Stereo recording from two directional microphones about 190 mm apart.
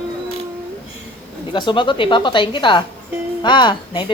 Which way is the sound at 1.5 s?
25° left (ahead or behind).